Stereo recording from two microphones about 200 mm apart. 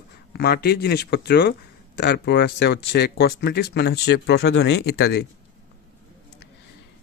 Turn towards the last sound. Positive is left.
turn(degrees=60)  # may be behind; listen again after turning